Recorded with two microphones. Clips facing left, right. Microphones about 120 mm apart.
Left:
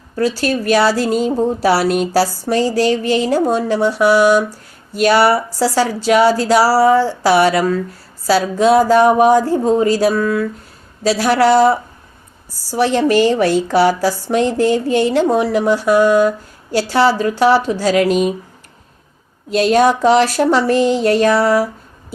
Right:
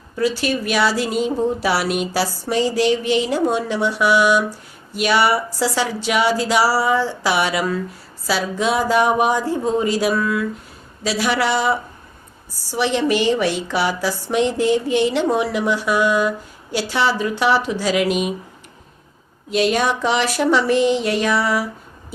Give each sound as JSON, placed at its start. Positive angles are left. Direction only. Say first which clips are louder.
{"t": 0.2, "sound": "a woman's voice", "louder": "left 3 dB", "side_deg": 35}
{"t": 19.5, "sound": "a woman's voice", "louder": "left 6 dB", "side_deg": 35}